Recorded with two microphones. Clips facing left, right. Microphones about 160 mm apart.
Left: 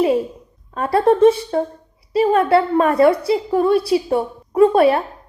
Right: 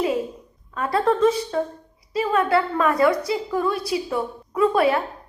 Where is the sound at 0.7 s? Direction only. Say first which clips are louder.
Left 6 dB; 30° left (ahead or behind).